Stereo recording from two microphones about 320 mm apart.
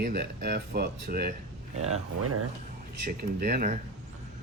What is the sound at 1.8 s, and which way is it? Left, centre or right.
Speech, right.